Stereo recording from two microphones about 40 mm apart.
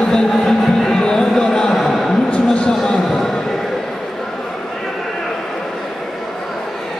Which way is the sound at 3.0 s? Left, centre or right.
Centre.